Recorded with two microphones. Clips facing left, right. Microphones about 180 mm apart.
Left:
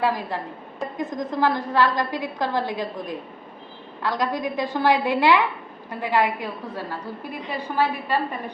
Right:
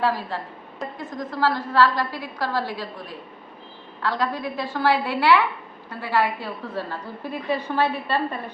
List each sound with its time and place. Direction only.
0.0 s a woman's voice: 15° left (ahead or behind)